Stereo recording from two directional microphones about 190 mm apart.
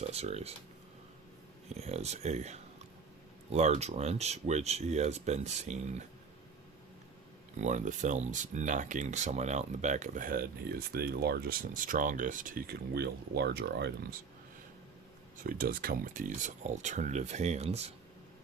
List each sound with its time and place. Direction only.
0.0 s speech: 35° right (ahead or behind)
1.7 s speech: 35° right (ahead or behind)
7.6 s speech: 40° right (ahead or behind); by 13.9 s 60° right (ahead or behind)
15.4 s speech: 50° right (ahead or behind); by 17.9 s 35° right (ahead or behind)